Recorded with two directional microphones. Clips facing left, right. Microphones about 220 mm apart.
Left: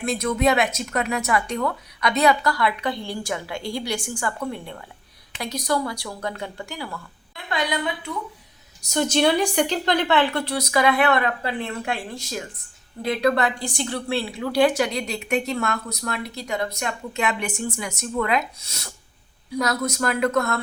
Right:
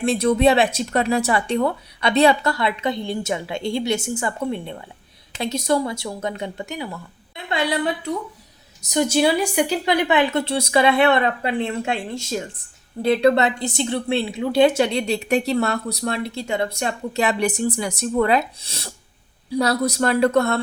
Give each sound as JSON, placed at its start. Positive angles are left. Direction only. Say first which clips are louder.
{"t": 0.0, "sound": "a woman's voice", "louder": "right 5 dB", "side_deg": -30}
{"t": 8.8, "sound": "a woman's voice", "louder": "right 2 dB", "side_deg": -15}